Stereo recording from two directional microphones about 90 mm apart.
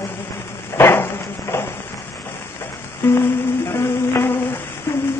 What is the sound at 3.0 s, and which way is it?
Music, 25° left (ahead or behind).